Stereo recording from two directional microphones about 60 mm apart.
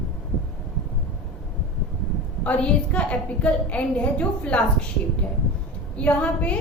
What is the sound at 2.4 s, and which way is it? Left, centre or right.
A woman's voice, left.